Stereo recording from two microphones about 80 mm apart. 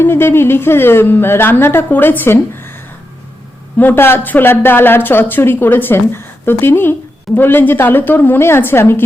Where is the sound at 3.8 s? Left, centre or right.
Left.